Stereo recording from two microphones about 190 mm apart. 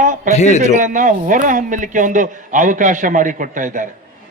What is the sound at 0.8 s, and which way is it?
A man's voice, 45° right (ahead or behind).